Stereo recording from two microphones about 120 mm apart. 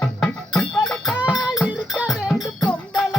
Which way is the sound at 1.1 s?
10° right (ahead or behind).